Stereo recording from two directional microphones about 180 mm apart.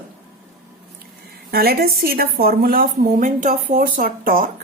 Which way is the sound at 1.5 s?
60° right (ahead or behind).